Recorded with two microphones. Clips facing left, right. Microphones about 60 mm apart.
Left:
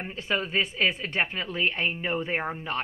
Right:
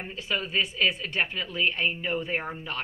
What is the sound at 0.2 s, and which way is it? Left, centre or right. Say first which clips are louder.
A woman's voice: left 1 dB; left.